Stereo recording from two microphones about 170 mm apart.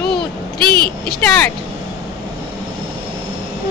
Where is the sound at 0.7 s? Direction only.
60° left (ahead or behind).